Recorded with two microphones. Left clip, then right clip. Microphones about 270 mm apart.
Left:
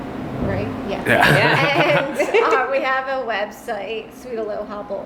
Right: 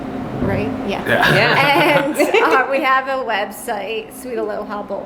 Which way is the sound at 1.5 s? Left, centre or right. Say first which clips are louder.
Right 3 dB; right.